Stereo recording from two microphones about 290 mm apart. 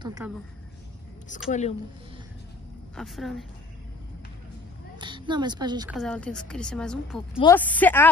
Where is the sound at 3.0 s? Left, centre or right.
Centre.